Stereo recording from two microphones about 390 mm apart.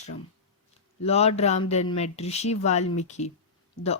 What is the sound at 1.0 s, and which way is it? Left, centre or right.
Speech, centre.